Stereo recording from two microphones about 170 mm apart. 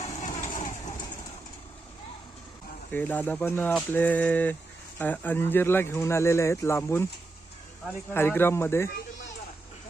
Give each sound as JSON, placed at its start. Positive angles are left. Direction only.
{"t": 0.2, "sound": "vehicle", "side_deg": 45}
{"t": 2.9, "sound": "speech", "side_deg": 10}
{"t": 8.1, "sound": "speech", "side_deg": 15}